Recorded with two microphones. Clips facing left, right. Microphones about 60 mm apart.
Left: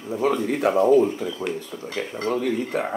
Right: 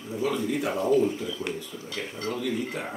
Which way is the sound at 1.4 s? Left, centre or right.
Left.